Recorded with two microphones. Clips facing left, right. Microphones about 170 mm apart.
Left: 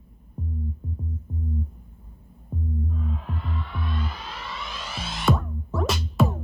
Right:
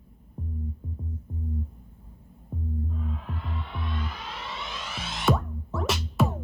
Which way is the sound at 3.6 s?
25° right (ahead or behind).